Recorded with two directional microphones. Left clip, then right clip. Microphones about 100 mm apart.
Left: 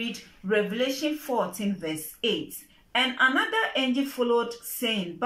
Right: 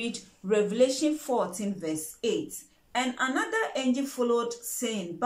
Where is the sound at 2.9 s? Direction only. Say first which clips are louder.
Left 6 dB; 5° left (ahead or behind).